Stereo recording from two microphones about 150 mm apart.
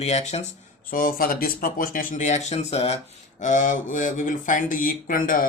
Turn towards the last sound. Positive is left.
turn(degrees=65)  # may be behind; listen again after turning